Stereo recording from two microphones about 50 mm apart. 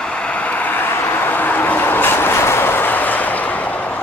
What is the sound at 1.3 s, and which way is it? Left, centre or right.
Train, left.